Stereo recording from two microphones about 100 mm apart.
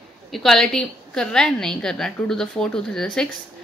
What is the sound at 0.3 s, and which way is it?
A woman's voice, centre (ahead or behind).